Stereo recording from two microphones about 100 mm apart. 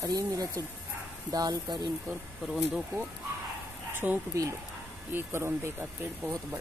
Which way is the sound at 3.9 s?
20° right (ahead or behind).